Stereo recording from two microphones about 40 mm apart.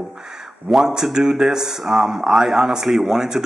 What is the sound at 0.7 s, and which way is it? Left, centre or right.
Speech, centre.